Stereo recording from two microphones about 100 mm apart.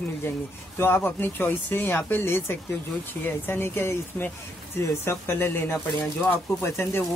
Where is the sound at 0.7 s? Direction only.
20° left (ahead or behind).